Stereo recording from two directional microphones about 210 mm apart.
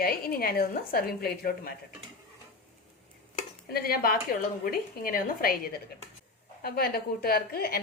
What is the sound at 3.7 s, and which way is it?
A woman's voice, 45° left (ahead or behind).